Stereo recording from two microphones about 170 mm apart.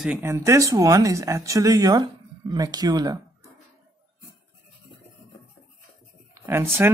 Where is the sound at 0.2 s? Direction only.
15° right (ahead or behind).